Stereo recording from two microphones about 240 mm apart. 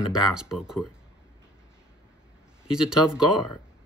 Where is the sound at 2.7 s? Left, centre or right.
Centre.